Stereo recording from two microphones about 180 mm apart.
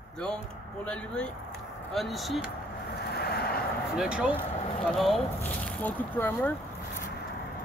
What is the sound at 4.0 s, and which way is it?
Speech, 5° right (ahead or behind).